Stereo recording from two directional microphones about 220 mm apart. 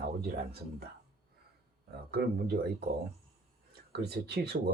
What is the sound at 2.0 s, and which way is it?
Speech, 45° right (ahead or behind).